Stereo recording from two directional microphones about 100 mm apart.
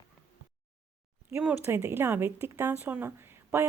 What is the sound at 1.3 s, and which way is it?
A woman's voice, 20° right (ahead or behind).